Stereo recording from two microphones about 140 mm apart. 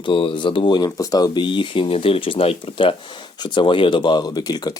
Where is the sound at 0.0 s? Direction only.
40° left (ahead or behind).